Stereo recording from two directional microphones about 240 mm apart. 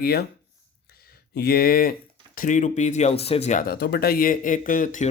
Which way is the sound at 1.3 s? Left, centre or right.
Left.